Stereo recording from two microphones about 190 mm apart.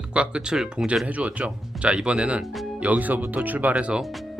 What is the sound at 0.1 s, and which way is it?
Speech, 5° right (ahead or behind).